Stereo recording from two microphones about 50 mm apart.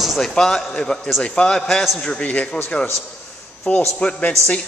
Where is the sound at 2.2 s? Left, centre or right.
Left.